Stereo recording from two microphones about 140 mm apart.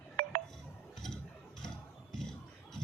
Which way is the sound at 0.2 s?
90° right.